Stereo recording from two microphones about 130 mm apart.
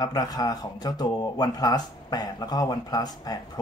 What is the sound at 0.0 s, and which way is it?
Speech, 30° left (ahead or behind).